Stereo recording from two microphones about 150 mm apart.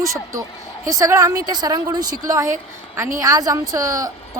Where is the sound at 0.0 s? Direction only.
20° right (ahead or behind).